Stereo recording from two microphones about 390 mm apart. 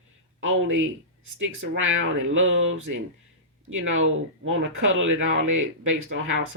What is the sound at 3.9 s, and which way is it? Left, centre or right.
Speech, right.